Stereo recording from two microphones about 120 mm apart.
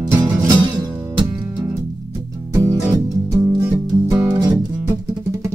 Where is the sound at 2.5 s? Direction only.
25° right (ahead or behind).